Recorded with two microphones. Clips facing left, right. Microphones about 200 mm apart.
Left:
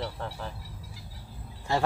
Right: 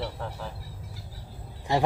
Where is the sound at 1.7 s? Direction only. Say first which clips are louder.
Right 2 dB; 15° right (ahead or behind).